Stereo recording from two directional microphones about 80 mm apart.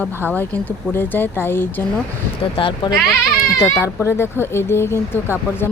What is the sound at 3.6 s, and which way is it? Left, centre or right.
A woman's voice, left.